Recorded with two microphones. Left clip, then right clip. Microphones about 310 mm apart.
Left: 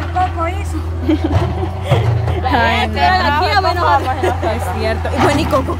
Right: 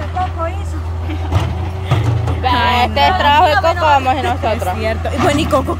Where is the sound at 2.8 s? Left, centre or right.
Centre.